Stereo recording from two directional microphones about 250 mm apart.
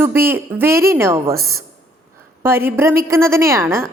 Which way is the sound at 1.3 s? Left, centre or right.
Right.